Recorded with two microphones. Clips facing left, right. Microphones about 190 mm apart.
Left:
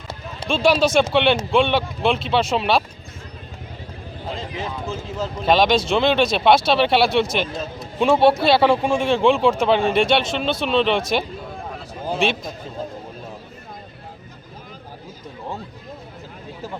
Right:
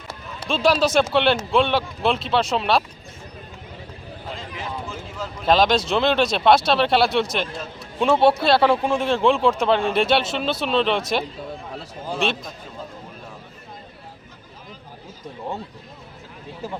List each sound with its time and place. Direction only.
0.4 s speech: centre (ahead or behind)
4.5 s speech: 20° left (ahead or behind)
5.5 s speech: centre (ahead or behind)